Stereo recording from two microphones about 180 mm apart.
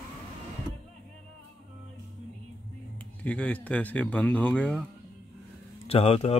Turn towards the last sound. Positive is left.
turn(degrees=35)  # may be behind; listen again after turning